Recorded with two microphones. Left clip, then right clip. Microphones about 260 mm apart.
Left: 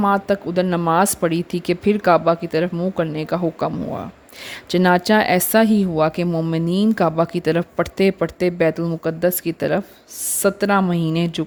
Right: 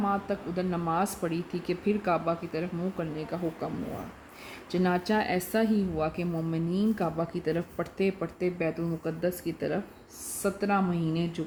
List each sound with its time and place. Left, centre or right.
0.0 s speech: left
4.7 s speech: left